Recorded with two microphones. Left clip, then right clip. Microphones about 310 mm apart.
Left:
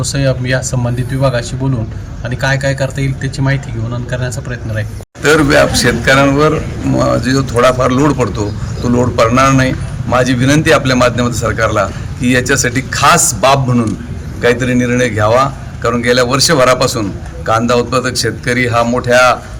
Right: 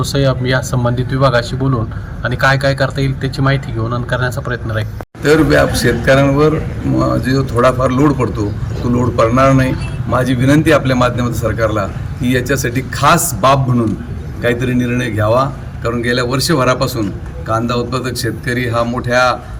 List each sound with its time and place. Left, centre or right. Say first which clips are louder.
0.0 s speech: even; centre
5.2 s a man's voice: left 2 dB; centre